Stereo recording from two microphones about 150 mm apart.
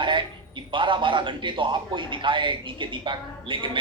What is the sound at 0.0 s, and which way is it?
A man's voice, 35° right (ahead or behind).